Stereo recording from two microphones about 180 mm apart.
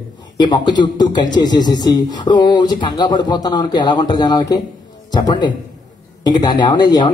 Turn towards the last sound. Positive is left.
turn(degrees=25)  # may be behind; listen again after turning